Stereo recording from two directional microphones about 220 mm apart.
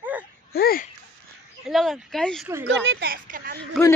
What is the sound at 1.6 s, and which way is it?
Speech, centre (ahead or behind).